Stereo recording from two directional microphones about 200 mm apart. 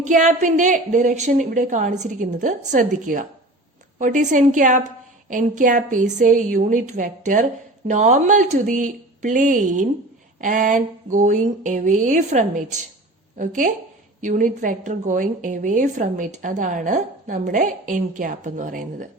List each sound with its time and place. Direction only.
0.1 s a woman's voice: 35° right (ahead or behind)